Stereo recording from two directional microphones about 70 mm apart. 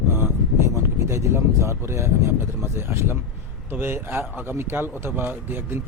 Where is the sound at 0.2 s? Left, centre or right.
Right.